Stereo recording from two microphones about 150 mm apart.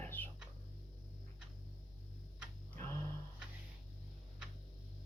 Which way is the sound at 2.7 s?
15° left (ahead or behind).